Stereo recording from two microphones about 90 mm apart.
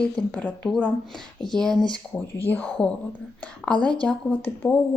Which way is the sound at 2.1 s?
20° left (ahead or behind).